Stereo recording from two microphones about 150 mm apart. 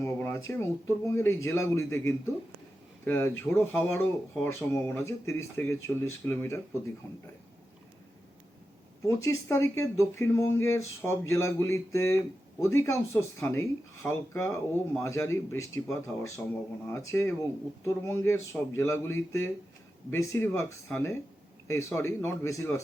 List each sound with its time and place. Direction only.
0.0 s speech: 20° left (ahead or behind)
9.0 s speech: 20° left (ahead or behind)